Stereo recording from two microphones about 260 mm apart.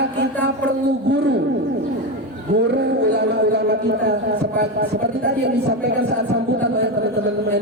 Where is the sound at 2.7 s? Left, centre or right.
Right.